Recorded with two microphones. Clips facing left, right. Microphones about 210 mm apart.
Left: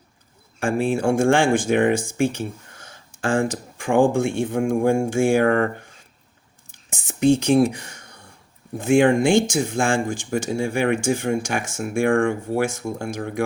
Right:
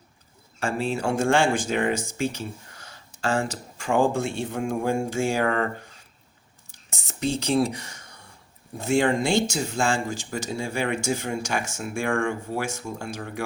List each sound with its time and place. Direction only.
0.6 s speech: 50° left (ahead or behind)
6.7 s whispering: 55° left (ahead or behind)
8.8 s speech: 55° left (ahead or behind)